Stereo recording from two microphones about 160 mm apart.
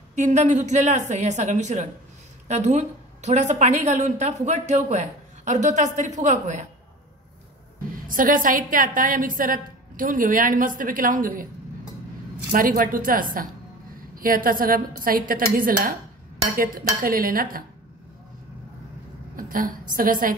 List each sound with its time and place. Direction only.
0.1 s a man's voice: 45° right (ahead or behind)
8.1 s a woman's voice: 60° right (ahead or behind)
12.5 s a woman's voice: 60° right (ahead or behind)
19.3 s a woman's voice: 60° right (ahead or behind)